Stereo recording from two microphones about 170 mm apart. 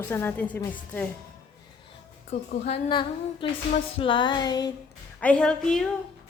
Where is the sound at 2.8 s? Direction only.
30° left (ahead or behind).